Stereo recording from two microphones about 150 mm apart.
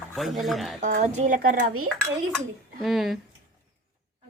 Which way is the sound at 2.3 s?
Centre (ahead or behind).